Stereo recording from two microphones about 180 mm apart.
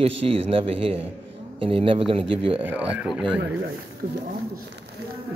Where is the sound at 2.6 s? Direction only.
10° right (ahead or behind).